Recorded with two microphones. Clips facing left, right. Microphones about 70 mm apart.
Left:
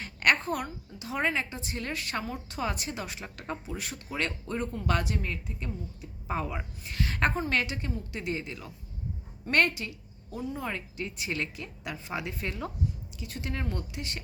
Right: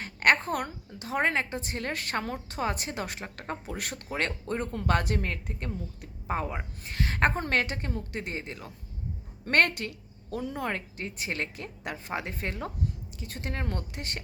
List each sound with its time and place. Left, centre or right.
0.0 s a woman's voice: right
4.1 s a woman's voice: right
6.3 s a woman's voice: right
9.5 s a woman's voice: right
10.4 s speech: right
10.7 s a woman's voice: right